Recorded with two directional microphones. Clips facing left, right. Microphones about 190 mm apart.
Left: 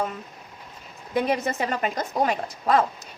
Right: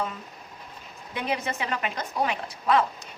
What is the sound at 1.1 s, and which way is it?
Speech, 45° left (ahead or behind).